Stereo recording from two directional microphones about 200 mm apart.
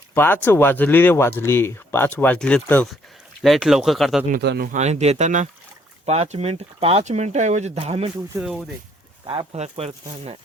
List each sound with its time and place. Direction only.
0.1 s speech: 10° left (ahead or behind)
4.3 s speech: 55° right (ahead or behind); by 8.1 s 30° right (ahead or behind)
8.4 s speech: 5° right (ahead or behind)
9.2 s speech: 25° right (ahead or behind)